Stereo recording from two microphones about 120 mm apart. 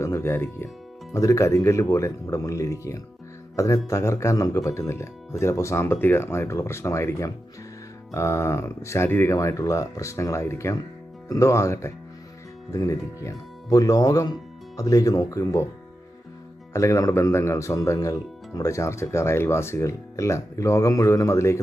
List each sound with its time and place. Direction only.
0.0 s speech: 20° left (ahead or behind)
16.7 s speech: 25° left (ahead or behind)